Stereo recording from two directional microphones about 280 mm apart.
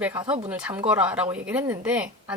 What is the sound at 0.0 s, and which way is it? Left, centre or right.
A woman's voice, centre.